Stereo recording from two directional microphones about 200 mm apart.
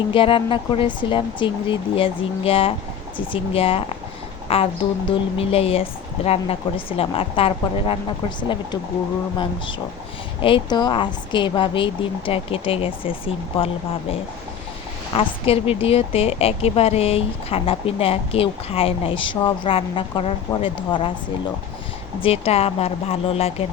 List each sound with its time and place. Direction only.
0.1 s a woman's voice: 25° left (ahead or behind)
10.4 s a woman's voice: 25° left (ahead or behind)
15.1 s a woman's voice: 25° left (ahead or behind)
22.2 s a woman's voice: 30° left (ahead or behind)